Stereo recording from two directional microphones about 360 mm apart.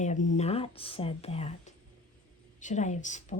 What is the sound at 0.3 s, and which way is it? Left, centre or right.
Speech, centre.